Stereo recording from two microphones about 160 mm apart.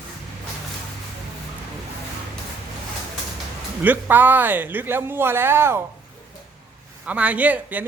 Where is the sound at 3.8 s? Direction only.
10° right (ahead or behind).